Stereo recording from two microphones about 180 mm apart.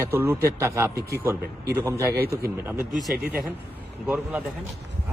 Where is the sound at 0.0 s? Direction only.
10° right (ahead or behind).